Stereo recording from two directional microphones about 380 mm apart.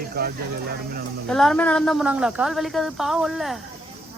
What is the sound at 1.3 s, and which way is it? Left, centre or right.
A woman's voice, centre.